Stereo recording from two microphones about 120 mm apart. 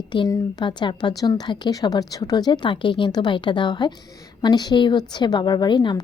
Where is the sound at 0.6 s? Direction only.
40° left (ahead or behind).